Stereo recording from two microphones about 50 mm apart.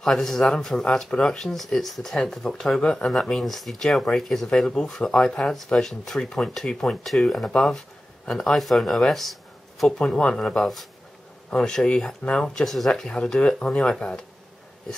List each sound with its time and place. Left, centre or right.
0.0 s speech: centre
2.8 s speech: centre
3.1 s speech: centre
4.5 s speech: centre
8.5 s speech: centre
9.8 s speech: centre
13.1 s speech: left